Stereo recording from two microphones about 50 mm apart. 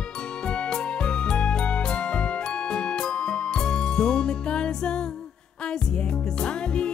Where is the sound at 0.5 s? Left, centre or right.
Centre.